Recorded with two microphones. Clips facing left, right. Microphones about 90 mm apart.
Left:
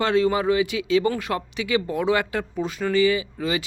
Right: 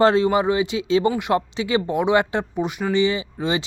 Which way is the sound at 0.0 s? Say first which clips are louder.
Right 4 dB; 30° right (ahead or behind).